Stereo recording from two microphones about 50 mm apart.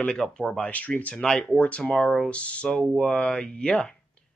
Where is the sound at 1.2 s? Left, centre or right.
Centre.